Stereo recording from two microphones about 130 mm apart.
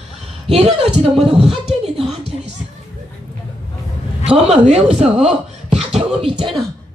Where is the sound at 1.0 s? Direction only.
50° right (ahead or behind).